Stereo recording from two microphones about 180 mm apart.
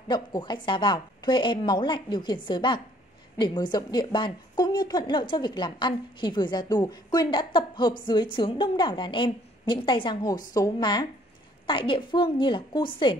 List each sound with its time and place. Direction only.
0.1 s a woman's voice: 25° left (ahead or behind)